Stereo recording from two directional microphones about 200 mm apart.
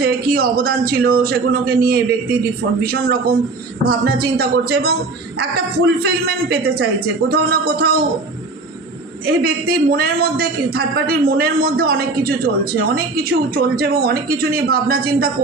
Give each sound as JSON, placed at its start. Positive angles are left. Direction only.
{"t": 0.0, "sound": "a man's voice", "side_deg": -50}
{"t": 9.2, "sound": "a man's voice", "side_deg": -50}